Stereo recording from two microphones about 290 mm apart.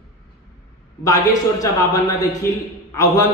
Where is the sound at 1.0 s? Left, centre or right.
Centre.